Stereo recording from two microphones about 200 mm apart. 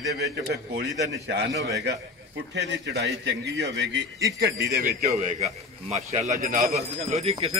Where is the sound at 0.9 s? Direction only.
15° right (ahead or behind).